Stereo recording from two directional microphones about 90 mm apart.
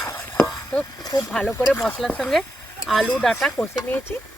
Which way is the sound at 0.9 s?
45° left (ahead or behind).